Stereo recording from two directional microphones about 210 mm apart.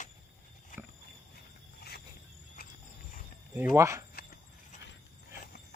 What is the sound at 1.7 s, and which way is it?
Cricket, 50° left (ahead or behind).